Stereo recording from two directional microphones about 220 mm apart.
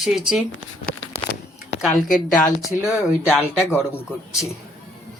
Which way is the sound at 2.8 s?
Centre (ahead or behind).